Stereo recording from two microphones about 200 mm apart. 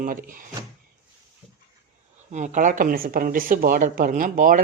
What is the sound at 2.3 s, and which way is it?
Speech, 35° right (ahead or behind).